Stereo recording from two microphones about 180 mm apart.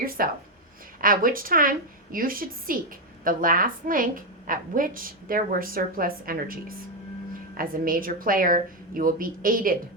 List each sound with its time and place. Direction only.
0.2 s a woman's voice: 55° right (ahead or behind)